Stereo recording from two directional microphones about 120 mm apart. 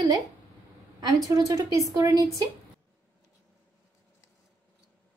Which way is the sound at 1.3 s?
30° right (ahead or behind).